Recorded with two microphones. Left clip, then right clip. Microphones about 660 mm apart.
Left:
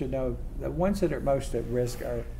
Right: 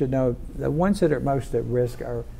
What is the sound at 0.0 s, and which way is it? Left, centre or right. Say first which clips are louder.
Speech: right 7 dB; right.